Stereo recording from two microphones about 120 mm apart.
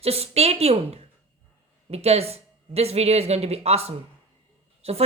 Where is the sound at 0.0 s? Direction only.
60° right (ahead or behind).